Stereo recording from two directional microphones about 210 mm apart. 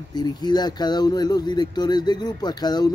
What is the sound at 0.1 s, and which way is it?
Speech, 20° left (ahead or behind).